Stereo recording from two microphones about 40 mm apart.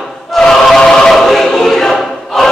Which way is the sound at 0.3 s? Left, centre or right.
Centre.